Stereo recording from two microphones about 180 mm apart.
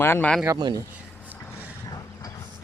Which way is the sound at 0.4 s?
20° right (ahead or behind).